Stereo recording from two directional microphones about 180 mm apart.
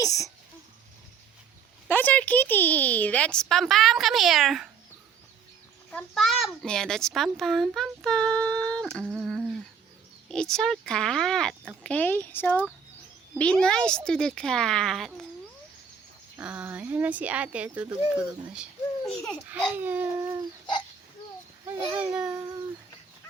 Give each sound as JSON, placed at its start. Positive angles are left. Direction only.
{"t": 0.0, "sound": "a sound", "side_deg": 20}
{"t": 1.9, "sound": "a child's voice", "side_deg": 10}
{"t": 5.9, "sound": "a child's voice", "side_deg": 5}
{"t": 9.1, "sound": "humming", "side_deg": 0}
{"t": 10.2, "sound": "a child's voice", "side_deg": 5}
{"t": 16.4, "sound": "a child's voice", "side_deg": -10}
{"t": 19.5, "sound": "speech", "side_deg": -10}
{"t": 21.7, "sound": "speech", "side_deg": -5}